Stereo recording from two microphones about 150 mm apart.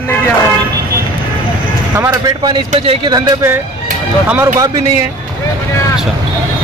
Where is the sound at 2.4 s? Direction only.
30° right (ahead or behind).